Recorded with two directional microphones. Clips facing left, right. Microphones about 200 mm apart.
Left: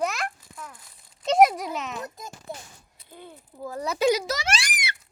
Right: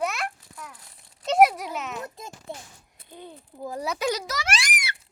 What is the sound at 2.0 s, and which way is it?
A child's voice, 25° right (ahead or behind).